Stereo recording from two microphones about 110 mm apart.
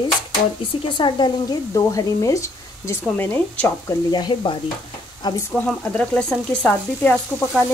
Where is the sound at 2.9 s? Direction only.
20° left (ahead or behind).